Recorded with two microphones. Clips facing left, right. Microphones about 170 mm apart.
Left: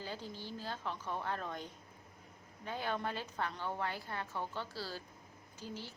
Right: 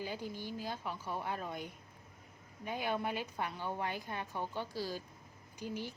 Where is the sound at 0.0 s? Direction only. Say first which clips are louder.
Right 3 dB; 15° right (ahead or behind).